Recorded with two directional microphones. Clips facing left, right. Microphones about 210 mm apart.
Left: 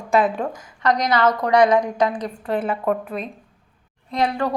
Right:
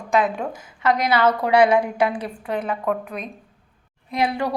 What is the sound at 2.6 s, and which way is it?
Speech, 5° left (ahead or behind).